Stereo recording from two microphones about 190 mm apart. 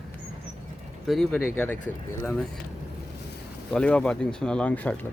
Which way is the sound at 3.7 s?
5° left (ahead or behind).